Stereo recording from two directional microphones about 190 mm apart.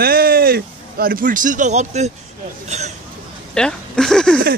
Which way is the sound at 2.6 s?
35° right (ahead or behind).